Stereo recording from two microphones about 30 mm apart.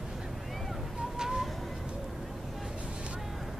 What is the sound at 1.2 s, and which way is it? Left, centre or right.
Bird, centre.